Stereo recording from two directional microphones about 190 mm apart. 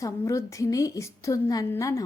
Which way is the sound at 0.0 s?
15° left (ahead or behind).